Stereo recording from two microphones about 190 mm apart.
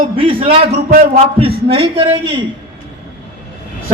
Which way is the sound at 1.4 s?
30° right (ahead or behind).